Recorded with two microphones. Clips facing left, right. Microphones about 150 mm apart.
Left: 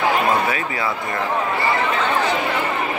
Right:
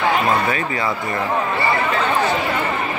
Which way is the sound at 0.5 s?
5° left (ahead or behind).